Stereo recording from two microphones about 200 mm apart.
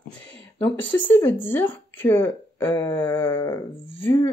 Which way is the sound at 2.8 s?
20° left (ahead or behind).